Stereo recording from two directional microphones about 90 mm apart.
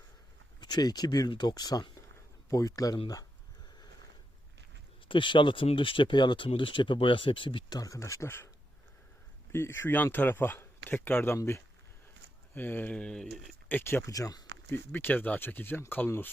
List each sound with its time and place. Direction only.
0.6 s speech: 50° left (ahead or behind)
5.0 s speech: 65° left (ahead or behind)
7.7 s speech: 40° left (ahead or behind)
9.5 s speech: 30° left (ahead or behind)
12.5 s speech: 20° left (ahead or behind)
13.7 s speech: 20° left (ahead or behind)
14.1 s speech: 40° left (ahead or behind)
14.7 s speech: 20° left (ahead or behind)